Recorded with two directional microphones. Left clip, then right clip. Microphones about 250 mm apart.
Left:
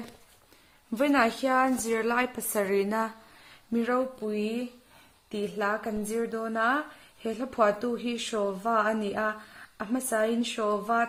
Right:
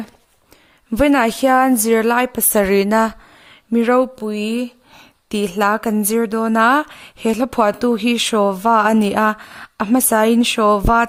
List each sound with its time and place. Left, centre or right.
0.9 s a woman's voice: right